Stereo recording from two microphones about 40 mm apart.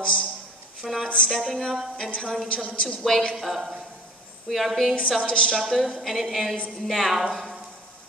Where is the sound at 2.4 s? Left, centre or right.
Left.